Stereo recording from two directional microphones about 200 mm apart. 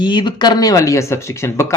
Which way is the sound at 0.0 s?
20° left (ahead or behind).